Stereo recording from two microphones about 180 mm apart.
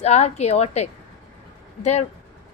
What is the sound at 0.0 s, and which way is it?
A woman's voice, 35° left (ahead or behind).